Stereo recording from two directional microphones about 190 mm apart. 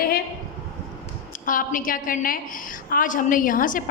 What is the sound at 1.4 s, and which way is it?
A woman's voice, 45° left (ahead or behind).